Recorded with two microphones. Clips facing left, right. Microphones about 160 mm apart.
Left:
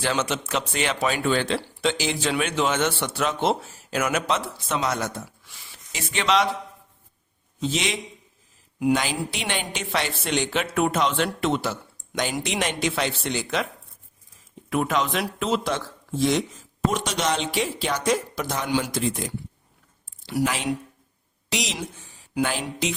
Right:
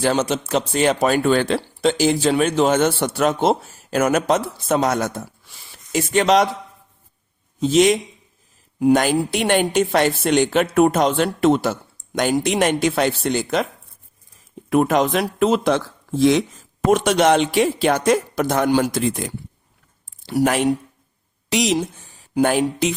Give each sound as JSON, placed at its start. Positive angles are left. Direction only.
{"t": 0.0, "sound": "speech", "side_deg": -40}
{"t": 7.6, "sound": "speech", "side_deg": -45}
{"t": 14.7, "sound": "speech", "side_deg": -50}
{"t": 16.8, "sound": "a woman's voice", "side_deg": -55}